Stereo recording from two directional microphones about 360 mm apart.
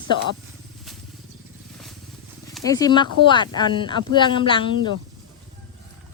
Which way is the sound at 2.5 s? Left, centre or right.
Centre.